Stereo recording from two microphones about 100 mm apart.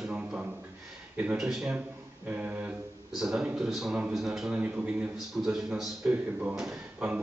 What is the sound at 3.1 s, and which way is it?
A man's voice, 5° right (ahead or behind).